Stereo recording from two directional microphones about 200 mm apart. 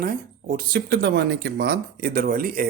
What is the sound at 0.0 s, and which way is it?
Speech, 45° right (ahead or behind).